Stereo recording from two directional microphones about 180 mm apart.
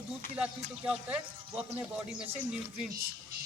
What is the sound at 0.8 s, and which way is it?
Speech, 5° right (ahead or behind).